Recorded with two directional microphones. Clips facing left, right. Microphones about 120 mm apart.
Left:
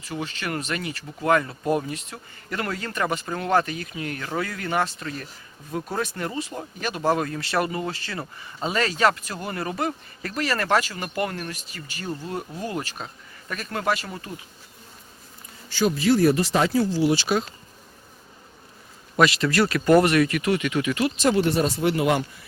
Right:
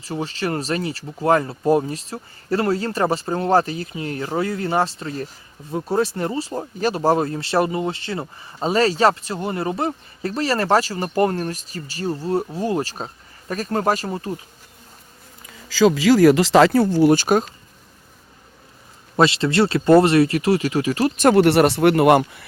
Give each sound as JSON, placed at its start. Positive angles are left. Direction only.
{"t": 0.0, "sound": "speech", "side_deg": -30}
{"t": 15.4, "sound": "speech", "side_deg": -90}
{"t": 19.1, "sound": "speech", "side_deg": -30}
{"t": 21.2, "sound": "speech", "side_deg": -60}